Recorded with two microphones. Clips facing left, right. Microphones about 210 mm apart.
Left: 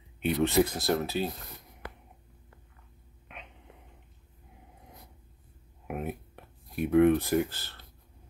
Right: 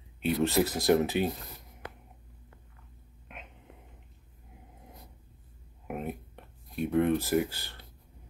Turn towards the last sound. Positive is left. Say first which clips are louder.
# even
turn(degrees=-15)  # may be behind; listen again after turning